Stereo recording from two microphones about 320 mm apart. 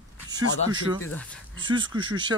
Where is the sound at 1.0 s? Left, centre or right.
Centre.